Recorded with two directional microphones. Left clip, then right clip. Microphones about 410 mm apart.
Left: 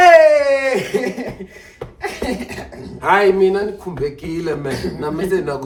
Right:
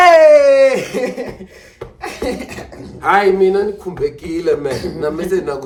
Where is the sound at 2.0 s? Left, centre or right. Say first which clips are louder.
Right 1 dB; centre.